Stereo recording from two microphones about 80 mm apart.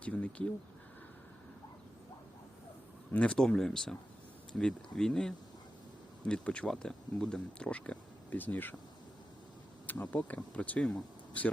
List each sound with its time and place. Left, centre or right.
0.0 s speech: centre
3.1 s speech: centre
9.8 s speech: left